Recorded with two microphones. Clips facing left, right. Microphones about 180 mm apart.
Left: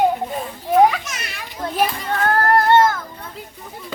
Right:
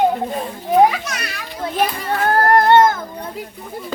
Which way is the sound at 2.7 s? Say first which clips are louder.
Right 2 dB; 20° right (ahead or behind).